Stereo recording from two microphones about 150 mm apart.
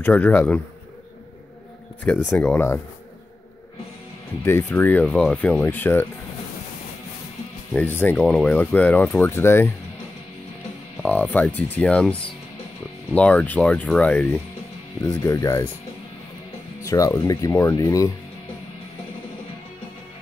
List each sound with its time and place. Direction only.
0.0 s speech: 10° left (ahead or behind)
2.3 s speech: 10° left (ahead or behind)
4.5 s speech: 15° left (ahead or behind)
7.7 s speech: 10° left (ahead or behind)
11.1 s speech: 10° left (ahead or behind)
16.8 s speech: 20° left (ahead or behind)